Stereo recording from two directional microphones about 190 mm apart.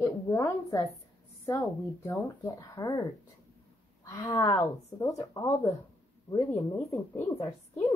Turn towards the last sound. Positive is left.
turn(degrees=15)  # may be behind; listen again after turning